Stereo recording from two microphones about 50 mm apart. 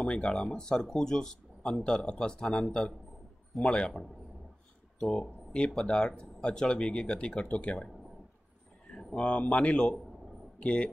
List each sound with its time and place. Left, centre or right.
0.0 s speech: centre
2.4 s speech: centre
5.0 s speech: centre; by 7.5 s left
8.9 s speech: centre